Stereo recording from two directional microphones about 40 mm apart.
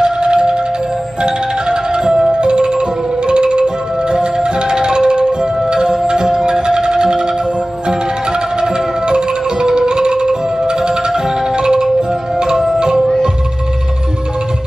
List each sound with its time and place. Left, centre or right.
0.0 s music: right
8.3 s music: right